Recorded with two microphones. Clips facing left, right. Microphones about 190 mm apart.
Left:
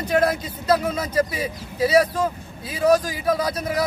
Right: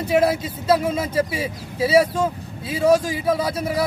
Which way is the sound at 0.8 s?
25° right (ahead or behind).